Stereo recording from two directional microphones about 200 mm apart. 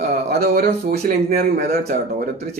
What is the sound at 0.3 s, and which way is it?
Speech, 50° right (ahead or behind).